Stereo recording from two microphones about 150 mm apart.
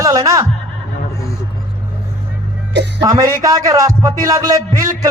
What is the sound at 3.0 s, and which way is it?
A man's voice, 25° right (ahead or behind).